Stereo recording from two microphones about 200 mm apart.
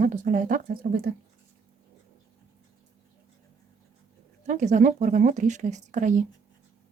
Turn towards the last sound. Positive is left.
turn(degrees=-40)  # may be behind; listen again after turning